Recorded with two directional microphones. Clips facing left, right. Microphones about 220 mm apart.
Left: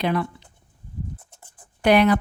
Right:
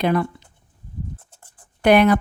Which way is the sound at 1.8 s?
50° right (ahead or behind).